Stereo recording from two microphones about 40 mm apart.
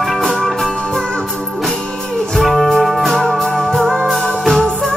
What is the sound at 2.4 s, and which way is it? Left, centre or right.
Music, centre.